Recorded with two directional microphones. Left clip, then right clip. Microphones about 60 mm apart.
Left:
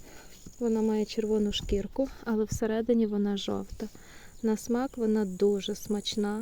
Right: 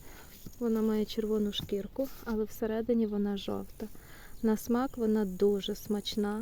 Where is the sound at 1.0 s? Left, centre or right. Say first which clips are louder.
Left 3 dB; centre.